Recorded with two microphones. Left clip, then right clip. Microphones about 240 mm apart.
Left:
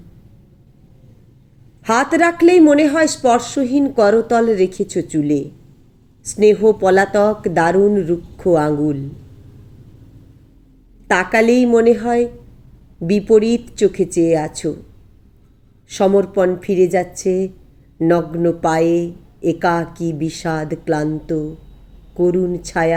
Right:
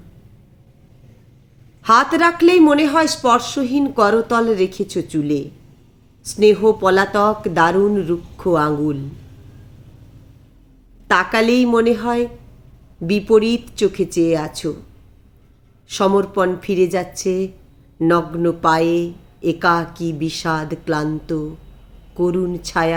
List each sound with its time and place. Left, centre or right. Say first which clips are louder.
1.8 s speech: right 1 dB; centre
11.1 s speech: left 1 dB; centre
15.9 s speech: left 2 dB; centre